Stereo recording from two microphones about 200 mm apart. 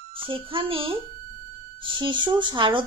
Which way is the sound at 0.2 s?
25° right (ahead or behind).